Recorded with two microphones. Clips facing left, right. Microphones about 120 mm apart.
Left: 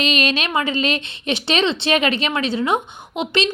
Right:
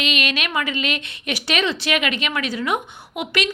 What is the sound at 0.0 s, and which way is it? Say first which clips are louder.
A woman's voice: left 4 dB; 35° left (ahead or behind).